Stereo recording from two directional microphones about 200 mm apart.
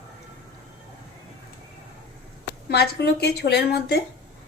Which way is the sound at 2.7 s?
55° left (ahead or behind).